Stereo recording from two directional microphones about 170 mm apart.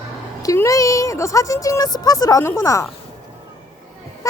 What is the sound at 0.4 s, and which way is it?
Speech, 20° left (ahead or behind).